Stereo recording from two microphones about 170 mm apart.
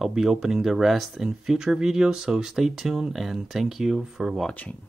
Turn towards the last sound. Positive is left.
turn(degrees=10)  # may be behind; listen again after turning